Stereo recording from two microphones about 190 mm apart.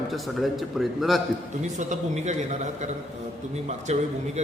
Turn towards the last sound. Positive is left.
turn(degrees=-35)  # may be behind; listen again after turning